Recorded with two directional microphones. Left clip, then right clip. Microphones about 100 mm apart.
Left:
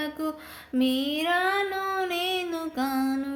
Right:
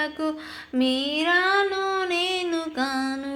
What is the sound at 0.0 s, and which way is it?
Music, 5° right (ahead or behind).